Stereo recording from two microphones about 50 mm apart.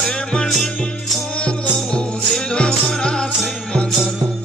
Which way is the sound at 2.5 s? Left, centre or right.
Centre.